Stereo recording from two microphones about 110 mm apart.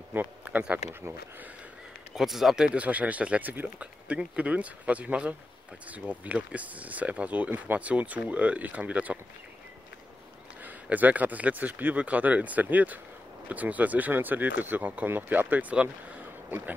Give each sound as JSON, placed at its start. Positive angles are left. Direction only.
{"t": 0.1, "sound": "speech", "side_deg": -15}
{"t": 1.0, "sound": "speech", "side_deg": -25}
{"t": 2.1, "sound": "speech", "side_deg": 0}
{"t": 10.6, "sound": "speech", "side_deg": -15}